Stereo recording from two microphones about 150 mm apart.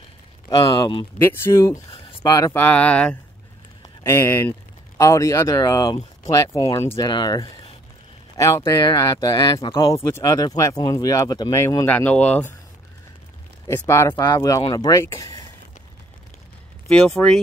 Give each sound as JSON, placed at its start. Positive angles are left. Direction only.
{"t": 0.5, "sound": "speech", "side_deg": 25}
{"t": 1.2, "sound": "speech", "side_deg": 15}
{"t": 13.7, "sound": "speech", "side_deg": 15}
{"t": 14.1, "sound": "speech", "side_deg": 30}
{"t": 14.9, "sound": "speech", "side_deg": 20}
{"t": 16.8, "sound": "speech", "side_deg": 0}